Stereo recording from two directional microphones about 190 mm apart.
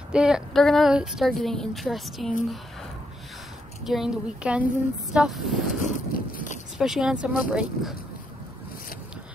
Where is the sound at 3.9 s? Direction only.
5° right (ahead or behind).